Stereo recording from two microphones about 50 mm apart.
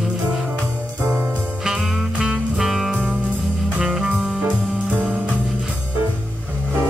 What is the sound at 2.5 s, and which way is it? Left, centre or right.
Music, centre.